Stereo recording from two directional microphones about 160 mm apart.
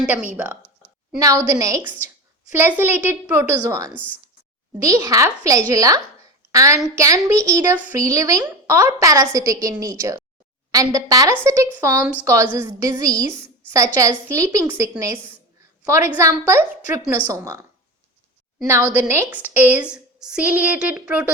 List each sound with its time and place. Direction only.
0.0 s a woman's voice: 10° right (ahead or behind)
18.7 s a woman's voice: 10° right (ahead or behind)